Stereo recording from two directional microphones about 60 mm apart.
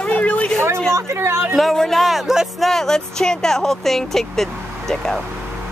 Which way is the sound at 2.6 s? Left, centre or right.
Centre.